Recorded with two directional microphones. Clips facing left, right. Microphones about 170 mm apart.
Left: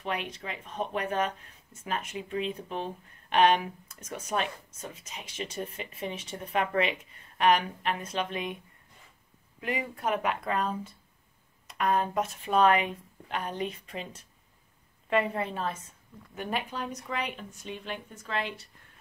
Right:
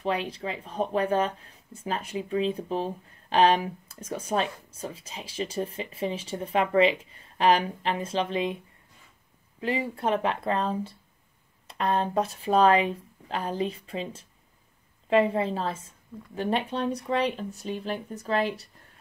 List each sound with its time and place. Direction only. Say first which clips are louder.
0.0 s speech: right 6 dB; 30° right (ahead or behind)
9.6 s a woman's voice: right 5 dB; 30° right (ahead or behind)